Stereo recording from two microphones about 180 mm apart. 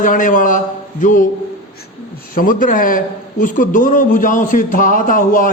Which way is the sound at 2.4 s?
50° left (ahead or behind).